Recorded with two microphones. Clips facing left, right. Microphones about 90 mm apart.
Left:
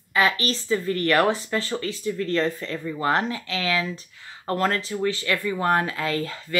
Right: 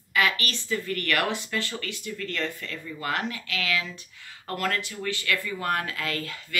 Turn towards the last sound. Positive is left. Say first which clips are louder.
# left 6 dB
turn(degrees=30)  # may be behind; listen again after turning